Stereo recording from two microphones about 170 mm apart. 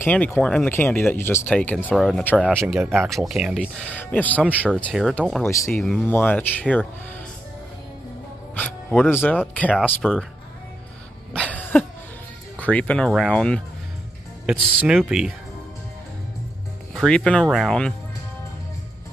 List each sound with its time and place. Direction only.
0.0 s speech: 10° left (ahead or behind); by 3.7 s 5° right (ahead or behind)
3.7 s speech: 5° left (ahead or behind)
5.7 s speech: centre (ahead or behind)
8.5 s speech: 10° left (ahead or behind)
11.3 s cough: 10° left (ahead or behind)
12.5 s speech: 10° left (ahead or behind)
16.9 s speech: 5° left (ahead or behind)